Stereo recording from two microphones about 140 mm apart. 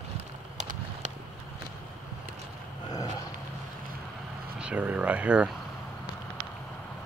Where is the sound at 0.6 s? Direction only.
60° right (ahead or behind).